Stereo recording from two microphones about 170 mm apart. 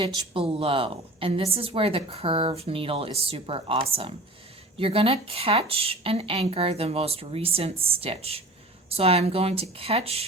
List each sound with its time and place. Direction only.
0.0 s a woman's voice: 30° right (ahead or behind)